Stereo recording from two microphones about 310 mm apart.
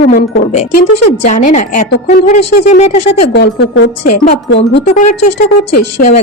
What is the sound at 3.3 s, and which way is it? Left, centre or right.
A woman's voice, left.